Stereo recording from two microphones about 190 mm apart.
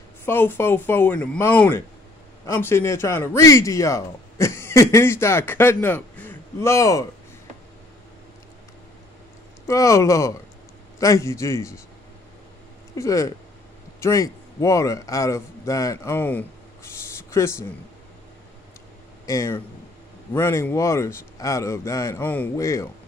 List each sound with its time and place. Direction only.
0.2 s speech: 10° left (ahead or behind)
9.7 s speech: 15° left (ahead or behind)
12.9 s a man's voice: 15° left (ahead or behind)
19.2 s speech: 15° left (ahead or behind)